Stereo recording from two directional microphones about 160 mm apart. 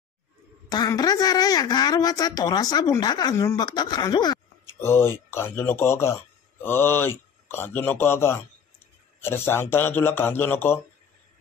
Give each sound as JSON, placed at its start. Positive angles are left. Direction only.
{"t": 0.7, "sound": "a woman's voice", "side_deg": 25}
{"t": 4.7, "sound": "speech", "side_deg": 15}